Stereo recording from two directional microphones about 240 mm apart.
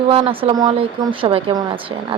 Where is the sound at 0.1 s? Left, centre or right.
Right.